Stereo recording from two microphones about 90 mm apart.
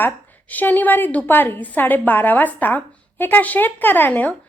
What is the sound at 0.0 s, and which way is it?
A woman's voice, 20° left (ahead or behind).